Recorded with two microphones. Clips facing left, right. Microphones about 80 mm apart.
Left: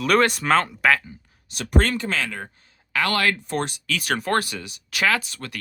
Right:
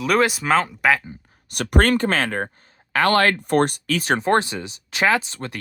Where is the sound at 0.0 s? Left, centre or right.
Centre.